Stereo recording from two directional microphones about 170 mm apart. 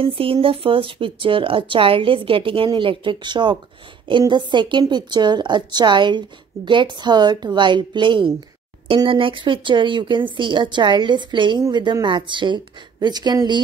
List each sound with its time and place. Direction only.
0.0 s a woman's voice: 30° right (ahead or behind)